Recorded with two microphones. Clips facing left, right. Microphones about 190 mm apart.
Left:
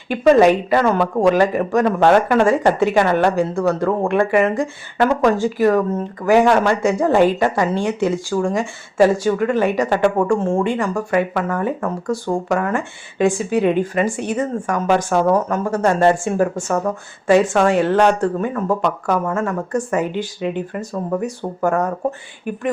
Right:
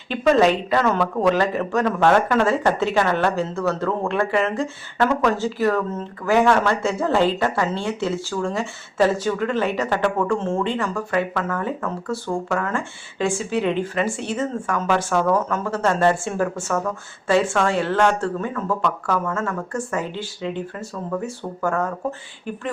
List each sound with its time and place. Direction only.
0.1 s speech: 10° left (ahead or behind)
0.9 s speech: 35° left (ahead or behind)
1.3 s speech: 15° left (ahead or behind)
15.1 s speech: 35° left (ahead or behind)
15.6 s speech: 15° left (ahead or behind)